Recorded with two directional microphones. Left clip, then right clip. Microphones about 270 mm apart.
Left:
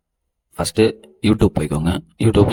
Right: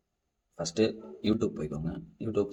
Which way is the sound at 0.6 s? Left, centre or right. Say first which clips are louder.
Left 12 dB; left.